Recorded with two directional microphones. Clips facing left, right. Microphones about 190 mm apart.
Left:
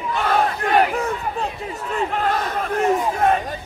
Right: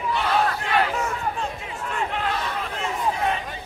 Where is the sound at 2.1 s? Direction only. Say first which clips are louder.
Left 5 dB; 45° left (ahead or behind).